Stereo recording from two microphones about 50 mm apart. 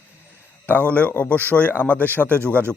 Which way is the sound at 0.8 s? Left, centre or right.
Left.